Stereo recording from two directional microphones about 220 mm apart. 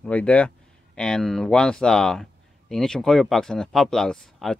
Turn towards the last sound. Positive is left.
turn(degrees=0)  # may be behind; listen again after turning